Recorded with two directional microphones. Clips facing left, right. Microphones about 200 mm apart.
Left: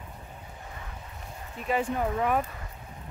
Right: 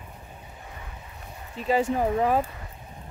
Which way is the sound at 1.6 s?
25° right (ahead or behind).